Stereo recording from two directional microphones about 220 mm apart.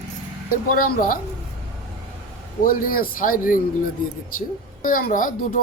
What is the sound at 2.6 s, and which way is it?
Speech, 40° left (ahead or behind).